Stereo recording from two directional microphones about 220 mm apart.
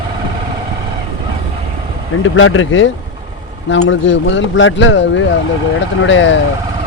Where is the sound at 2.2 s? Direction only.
65° left (ahead or behind).